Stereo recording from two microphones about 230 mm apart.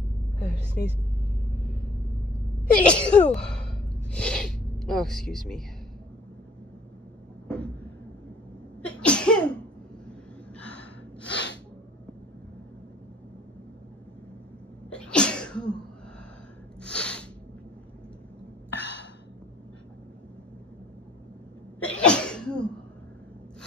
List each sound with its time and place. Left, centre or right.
2.7 s sneeze: centre
7.4 s a sound: centre
8.8 s sneeze: centre
10.5 s gasp: centre
11.2 s snort: left
14.9 s sneeze: centre
16.8 s a sound: centre
18.7 s a sound: left
21.8 s cough: centre